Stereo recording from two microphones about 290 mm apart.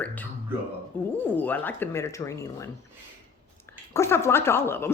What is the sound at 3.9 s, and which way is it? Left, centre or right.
Speech, centre.